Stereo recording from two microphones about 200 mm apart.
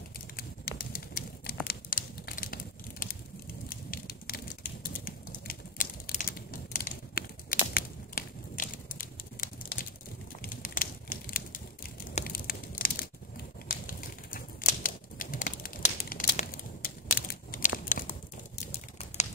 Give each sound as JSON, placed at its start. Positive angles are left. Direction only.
{"t": 0.4, "sound": "pigeon", "side_deg": 50}
{"t": 1.7, "sound": "a sound", "side_deg": 45}
{"t": 13.7, "sound": "typewriter", "side_deg": 45}
{"t": 18.7, "sound": "crumpling", "side_deg": 30}